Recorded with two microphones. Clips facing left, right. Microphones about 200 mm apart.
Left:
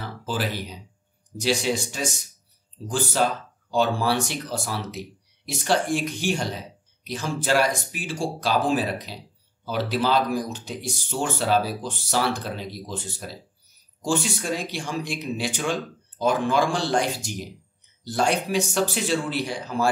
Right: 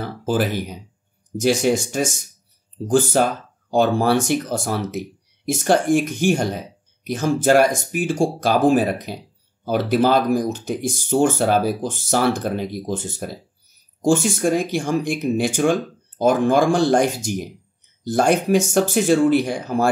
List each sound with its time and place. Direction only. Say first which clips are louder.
0.0 s speech: right 8 dB; 50° right (ahead or behind)